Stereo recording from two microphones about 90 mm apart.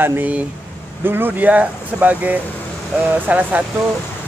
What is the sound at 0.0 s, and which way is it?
Speech, 20° right (ahead or behind).